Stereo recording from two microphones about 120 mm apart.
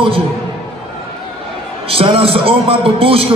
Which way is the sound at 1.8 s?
50° right (ahead or behind).